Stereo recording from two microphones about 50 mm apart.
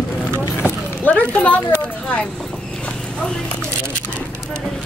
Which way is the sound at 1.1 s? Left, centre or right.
Left.